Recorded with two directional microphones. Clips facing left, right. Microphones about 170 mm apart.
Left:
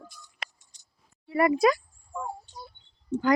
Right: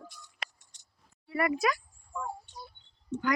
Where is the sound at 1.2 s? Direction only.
25° left (ahead or behind).